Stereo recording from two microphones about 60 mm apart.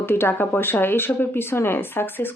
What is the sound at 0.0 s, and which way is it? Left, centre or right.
Speech, left.